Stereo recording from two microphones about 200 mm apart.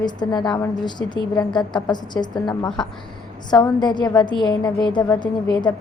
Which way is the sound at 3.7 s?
20° left (ahead or behind).